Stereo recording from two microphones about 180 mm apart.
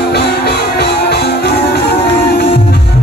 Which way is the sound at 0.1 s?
65° left (ahead or behind).